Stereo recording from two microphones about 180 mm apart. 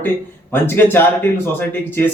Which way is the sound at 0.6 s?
10° left (ahead or behind).